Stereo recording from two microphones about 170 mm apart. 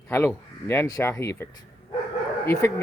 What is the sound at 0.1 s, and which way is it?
Speech, 15° left (ahead or behind).